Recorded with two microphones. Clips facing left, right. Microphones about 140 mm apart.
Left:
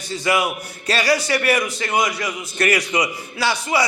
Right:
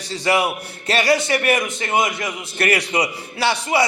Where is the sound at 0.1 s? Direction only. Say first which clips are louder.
Right 1 dB; 30° right (ahead or behind).